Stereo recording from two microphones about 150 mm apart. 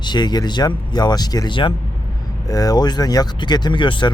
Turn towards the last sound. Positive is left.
turn(degrees=30)  # may be behind; listen again after turning